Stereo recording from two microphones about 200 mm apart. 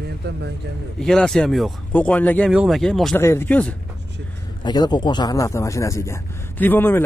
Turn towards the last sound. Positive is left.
turn(degrees=10)  # may be behind; listen again after turning